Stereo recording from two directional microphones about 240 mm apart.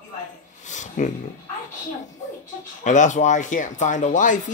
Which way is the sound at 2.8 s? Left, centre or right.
Left.